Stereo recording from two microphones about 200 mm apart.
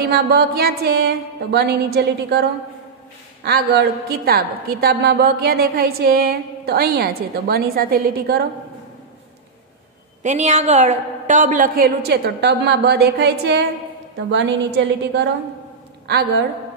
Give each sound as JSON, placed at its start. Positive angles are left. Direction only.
{"t": 0.0, "sound": "a woman's voice", "side_deg": -50}
{"t": 3.4, "sound": "a woman's voice", "side_deg": -55}
{"t": 10.2, "sound": "a woman's voice", "side_deg": -35}